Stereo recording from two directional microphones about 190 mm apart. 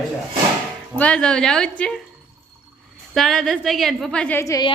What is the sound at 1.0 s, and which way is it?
A woman's voice, 5° left (ahead or behind).